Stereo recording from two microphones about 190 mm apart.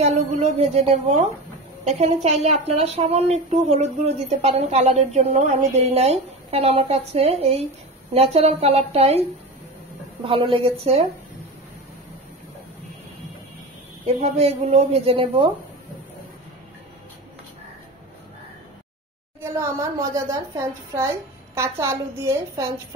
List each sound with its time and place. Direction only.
0.0 s a woman's voice: 35° right (ahead or behind)
10.2 s a woman's voice: 30° right (ahead or behind)
14.0 s a woman's voice: 35° right (ahead or behind)
19.4 s a woman's voice: 15° right (ahead or behind)